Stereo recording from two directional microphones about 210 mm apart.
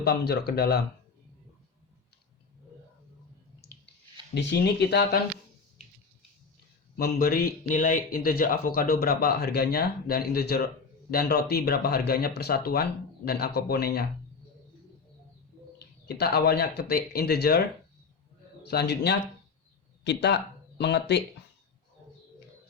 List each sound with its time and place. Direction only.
0.0 s speech: 50° left (ahead or behind)
4.4 s speech: 50° left (ahead or behind)
6.9 s speech: 45° left (ahead or behind)
15.8 s speech: 50° left (ahead or behind)
18.7 s speech: 50° left (ahead or behind)